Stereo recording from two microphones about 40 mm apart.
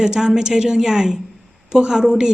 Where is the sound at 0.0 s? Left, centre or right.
Centre.